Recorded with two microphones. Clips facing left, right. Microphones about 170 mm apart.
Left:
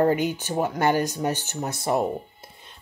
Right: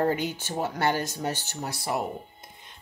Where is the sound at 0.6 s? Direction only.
15° left (ahead or behind).